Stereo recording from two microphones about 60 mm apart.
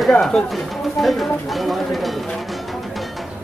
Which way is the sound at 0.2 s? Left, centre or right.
Centre.